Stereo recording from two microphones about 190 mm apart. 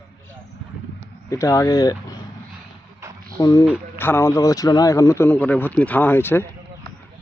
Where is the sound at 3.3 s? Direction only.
15° left (ahead or behind).